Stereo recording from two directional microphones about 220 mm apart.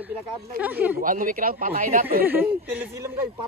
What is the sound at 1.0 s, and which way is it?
Speech, 40° right (ahead or behind).